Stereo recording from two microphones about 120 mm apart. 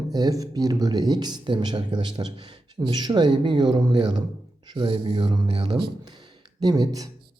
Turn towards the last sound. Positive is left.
turn(degrees=-30)  # may be behind; listen again after turning